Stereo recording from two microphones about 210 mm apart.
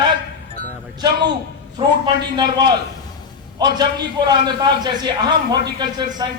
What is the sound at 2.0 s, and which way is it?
A man's voice, 20° right (ahead or behind).